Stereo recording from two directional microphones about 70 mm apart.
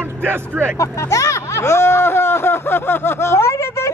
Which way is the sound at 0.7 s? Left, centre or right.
Left.